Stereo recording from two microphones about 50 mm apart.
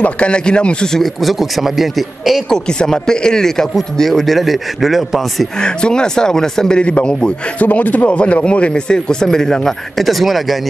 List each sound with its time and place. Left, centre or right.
0.0 s a man's voice: left
0.9 s a man's voice: centre
2.5 s a man's voice: centre
5.6 s speech: centre
6.8 s a man's voice: left
9.9 s a man's voice: centre